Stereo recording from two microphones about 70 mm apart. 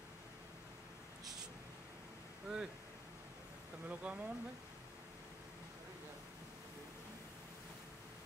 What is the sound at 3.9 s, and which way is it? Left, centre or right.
Speech, centre.